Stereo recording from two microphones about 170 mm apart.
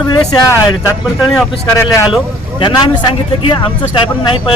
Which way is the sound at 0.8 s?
5° left (ahead or behind).